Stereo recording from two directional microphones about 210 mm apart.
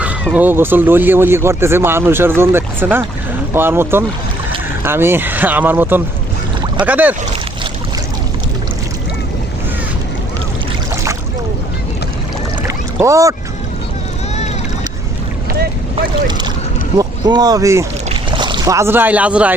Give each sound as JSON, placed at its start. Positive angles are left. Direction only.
{"t": 0.3, "sound": "speech", "side_deg": -10}
{"t": 12.6, "sound": "boat", "side_deg": -15}
{"t": 17.0, "sound": "speech", "side_deg": -20}